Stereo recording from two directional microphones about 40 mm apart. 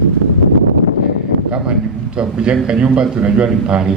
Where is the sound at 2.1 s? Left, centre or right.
Right.